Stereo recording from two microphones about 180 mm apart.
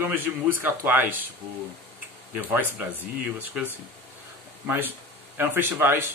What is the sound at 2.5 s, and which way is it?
Speech, 10° right (ahead or behind).